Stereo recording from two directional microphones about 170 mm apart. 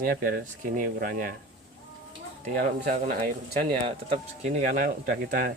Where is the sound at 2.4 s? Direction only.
50° right (ahead or behind).